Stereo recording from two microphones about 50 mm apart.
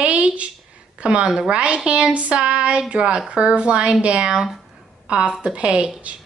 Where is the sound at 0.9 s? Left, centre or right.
Right.